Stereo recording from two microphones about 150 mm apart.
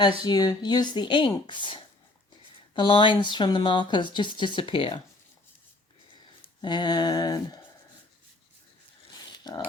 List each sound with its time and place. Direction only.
0.2 s speech: 25° left (ahead or behind)
6.4 s speech: 30° left (ahead or behind)
9.3 s mechanisms: 25° left (ahead or behind)